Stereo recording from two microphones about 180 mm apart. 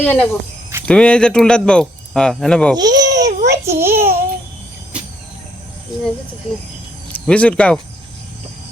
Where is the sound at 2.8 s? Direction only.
20° right (ahead or behind).